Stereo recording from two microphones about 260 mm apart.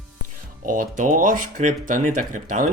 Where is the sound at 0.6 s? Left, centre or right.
Right.